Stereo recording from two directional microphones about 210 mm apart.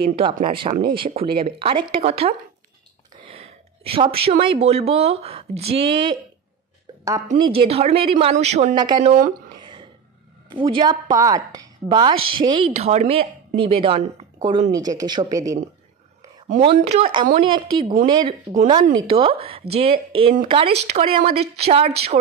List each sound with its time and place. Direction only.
0.1 s a woman's voice: 25° right (ahead or behind)
7.3 s a woman's voice: 25° right (ahead or behind)
9.6 s a sound: 20° right (ahead or behind)
10.5 s a woman's voice: 25° right (ahead or behind)
16.7 s a woman's voice: 30° right (ahead or behind)